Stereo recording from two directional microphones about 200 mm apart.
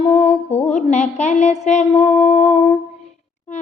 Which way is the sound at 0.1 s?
30° left (ahead or behind).